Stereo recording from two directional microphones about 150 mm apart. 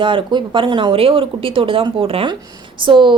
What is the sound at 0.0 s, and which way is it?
A woman's voice, 35° right (ahead or behind).